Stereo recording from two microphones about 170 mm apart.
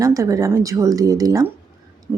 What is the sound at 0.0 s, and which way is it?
Speech, 20° right (ahead or behind).